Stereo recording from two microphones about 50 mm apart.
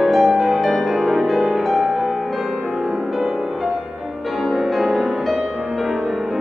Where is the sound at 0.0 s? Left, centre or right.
Centre.